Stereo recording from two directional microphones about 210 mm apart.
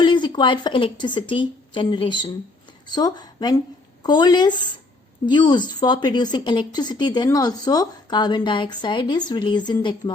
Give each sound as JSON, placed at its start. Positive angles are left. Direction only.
{"t": 0.0, "sound": "a woman's voice", "side_deg": 20}